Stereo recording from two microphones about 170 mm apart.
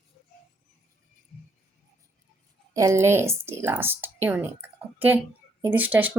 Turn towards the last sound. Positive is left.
turn(degrees=-10)  # may be behind; listen again after turning